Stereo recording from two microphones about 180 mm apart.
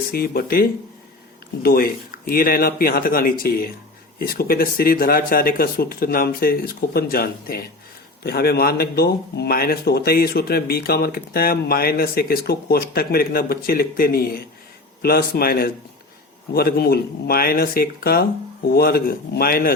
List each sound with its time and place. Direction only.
0.1 s a man's voice: 55° left (ahead or behind)